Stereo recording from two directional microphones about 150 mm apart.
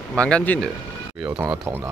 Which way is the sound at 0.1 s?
5° left (ahead or behind).